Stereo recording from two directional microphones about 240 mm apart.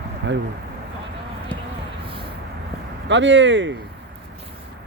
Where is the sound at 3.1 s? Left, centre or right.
Right.